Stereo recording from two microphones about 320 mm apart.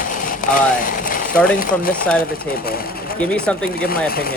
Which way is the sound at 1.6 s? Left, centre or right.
Left.